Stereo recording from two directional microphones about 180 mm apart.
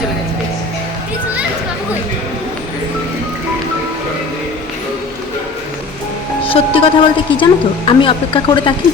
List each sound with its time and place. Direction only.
6.4 s speech: 30° left (ahead or behind)